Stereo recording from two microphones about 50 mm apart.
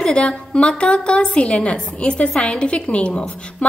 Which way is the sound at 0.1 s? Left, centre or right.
Left.